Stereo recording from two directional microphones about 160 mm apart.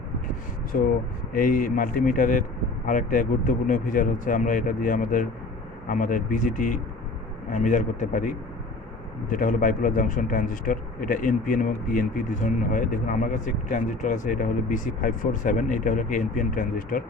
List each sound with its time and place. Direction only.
0.7 s speech: 60° left (ahead or behind)